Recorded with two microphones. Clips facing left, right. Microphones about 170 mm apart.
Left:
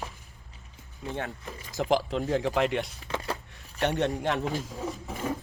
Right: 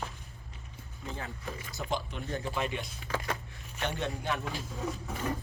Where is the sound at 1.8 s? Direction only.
90° left.